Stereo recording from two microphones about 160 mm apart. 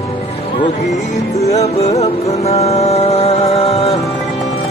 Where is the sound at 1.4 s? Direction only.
40° left (ahead or behind).